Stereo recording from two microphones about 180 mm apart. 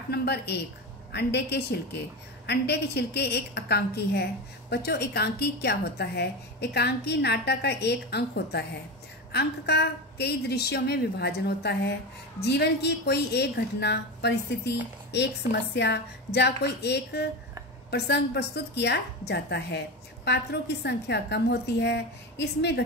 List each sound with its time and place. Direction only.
0.1 s a woman's voice: 65° left (ahead or behind)